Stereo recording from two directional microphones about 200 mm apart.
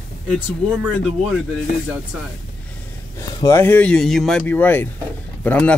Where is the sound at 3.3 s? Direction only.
15° left (ahead or behind).